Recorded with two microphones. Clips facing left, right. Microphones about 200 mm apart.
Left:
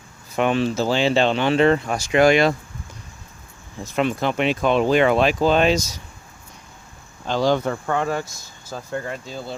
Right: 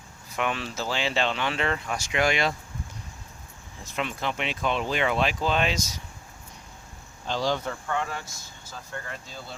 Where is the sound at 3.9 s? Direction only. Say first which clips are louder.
Left 9 dB; 45° left (ahead or behind).